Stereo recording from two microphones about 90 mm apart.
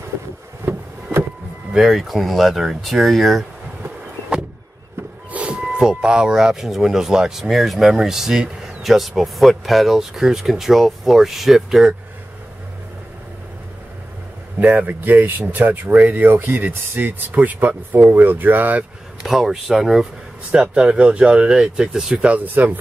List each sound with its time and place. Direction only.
0.6 s music: 25° right (ahead or behind)
1.7 s speech: 5° right (ahead or behind)
5.3 s music: 15° right (ahead or behind)
5.6 s speech: 10° right (ahead or behind)
14.6 s speech: 15° right (ahead or behind)
19.2 s speech: 5° right (ahead or behind); by 22.8 s 20° right (ahead or behind)